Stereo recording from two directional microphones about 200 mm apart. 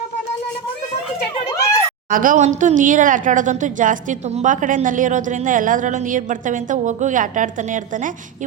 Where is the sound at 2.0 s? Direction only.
40° right (ahead or behind).